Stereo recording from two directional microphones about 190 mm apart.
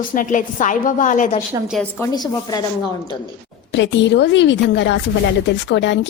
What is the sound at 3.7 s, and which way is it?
Speech, 70° left (ahead or behind).